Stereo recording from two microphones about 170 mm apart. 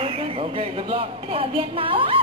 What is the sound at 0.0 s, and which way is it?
Speech, 35° right (ahead or behind).